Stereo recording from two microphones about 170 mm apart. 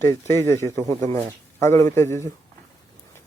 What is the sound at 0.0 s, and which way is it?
Speech, 15° left (ahead or behind).